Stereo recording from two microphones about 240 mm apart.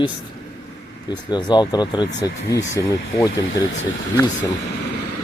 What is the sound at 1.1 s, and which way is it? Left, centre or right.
Speech, centre.